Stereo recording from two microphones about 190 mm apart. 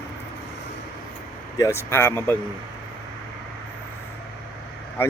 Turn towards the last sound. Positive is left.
turn(degrees=15)  # may be behind; listen again after turning